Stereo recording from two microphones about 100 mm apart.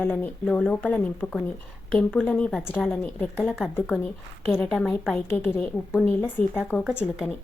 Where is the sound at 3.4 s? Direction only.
5° right (ahead or behind).